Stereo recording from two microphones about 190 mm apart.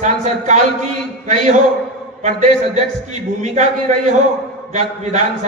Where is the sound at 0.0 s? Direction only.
40° right (ahead or behind).